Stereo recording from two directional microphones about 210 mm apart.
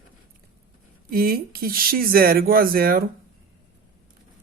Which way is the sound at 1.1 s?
45° right (ahead or behind).